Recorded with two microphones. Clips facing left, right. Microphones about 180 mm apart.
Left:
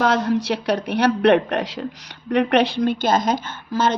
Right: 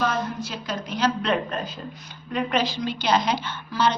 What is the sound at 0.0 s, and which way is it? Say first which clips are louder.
A woman's voice: left 7 dB; 75° left (ahead or behind).